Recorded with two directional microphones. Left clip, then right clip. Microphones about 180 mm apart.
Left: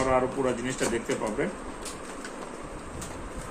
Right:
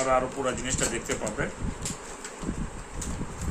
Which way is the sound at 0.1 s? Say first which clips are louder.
Even; 30° right (ahead or behind).